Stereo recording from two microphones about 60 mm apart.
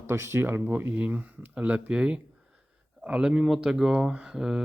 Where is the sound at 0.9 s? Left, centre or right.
Right.